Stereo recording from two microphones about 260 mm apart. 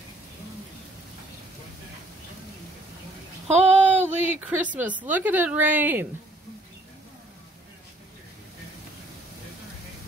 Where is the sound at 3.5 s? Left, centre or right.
Right.